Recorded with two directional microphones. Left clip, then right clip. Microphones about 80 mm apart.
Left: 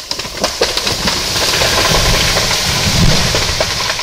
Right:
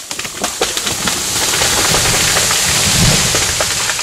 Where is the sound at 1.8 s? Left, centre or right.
Right.